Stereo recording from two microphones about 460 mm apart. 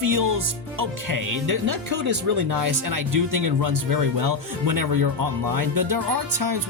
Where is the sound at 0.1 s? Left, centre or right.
Right.